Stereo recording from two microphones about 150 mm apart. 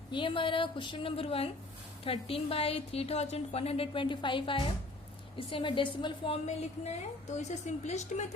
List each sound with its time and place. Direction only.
0.1 s a woman's voice: 35° left (ahead or behind); by 8.3 s 50° left (ahead or behind)